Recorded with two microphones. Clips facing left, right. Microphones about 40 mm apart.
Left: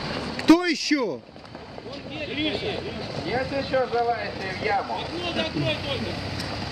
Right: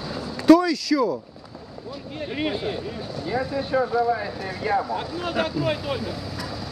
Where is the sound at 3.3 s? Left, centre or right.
Left.